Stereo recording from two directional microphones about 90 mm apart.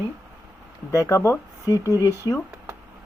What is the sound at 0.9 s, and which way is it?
Speech, 35° left (ahead or behind).